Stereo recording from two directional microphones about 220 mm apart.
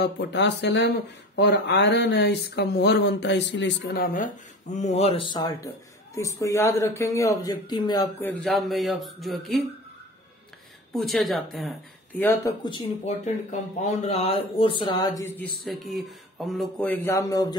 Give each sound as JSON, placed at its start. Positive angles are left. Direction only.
{"t": 0.0, "sound": "speech", "side_deg": 50}
{"t": 11.1, "sound": "speech", "side_deg": 0}
{"t": 12.6, "sound": "speech", "side_deg": 20}
{"t": 13.2, "sound": "speech", "side_deg": 30}